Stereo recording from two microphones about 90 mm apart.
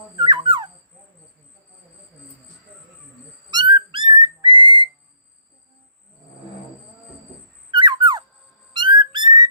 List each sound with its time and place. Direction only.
0.2 s dog: 60° right (ahead or behind)
3.5 s whistling: 65° right (ahead or behind)
7.7 s a sound: 60° right (ahead or behind)
8.7 s whistling: 55° right (ahead or behind)